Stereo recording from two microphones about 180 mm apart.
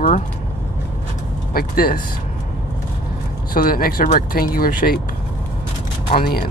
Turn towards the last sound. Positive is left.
turn(degrees=55)  # may be behind; listen again after turning